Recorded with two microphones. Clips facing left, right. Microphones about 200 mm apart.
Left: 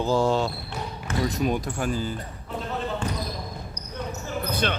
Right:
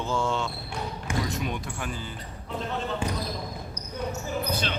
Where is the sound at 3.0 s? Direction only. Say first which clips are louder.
Even; 10° right (ahead or behind).